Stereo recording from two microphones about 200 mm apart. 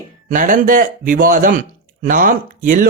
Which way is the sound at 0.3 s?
40° right (ahead or behind).